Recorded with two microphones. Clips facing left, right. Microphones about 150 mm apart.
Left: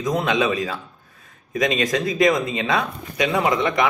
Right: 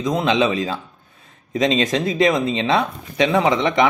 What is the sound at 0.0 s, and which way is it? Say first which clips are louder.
Speech: right 2 dB; 25° right (ahead or behind).